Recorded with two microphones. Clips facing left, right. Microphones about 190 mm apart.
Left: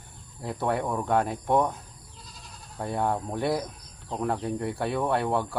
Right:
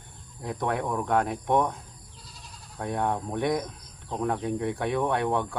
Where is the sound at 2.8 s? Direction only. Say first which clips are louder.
Even; centre (ahead or behind).